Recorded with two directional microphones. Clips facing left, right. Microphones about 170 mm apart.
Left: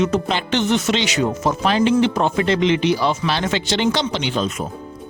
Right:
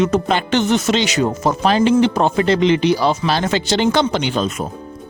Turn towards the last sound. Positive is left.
turn(degrees=-45)  # may be behind; listen again after turning